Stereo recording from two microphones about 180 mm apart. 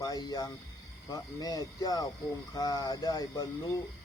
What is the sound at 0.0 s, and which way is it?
Speech, 20° left (ahead or behind).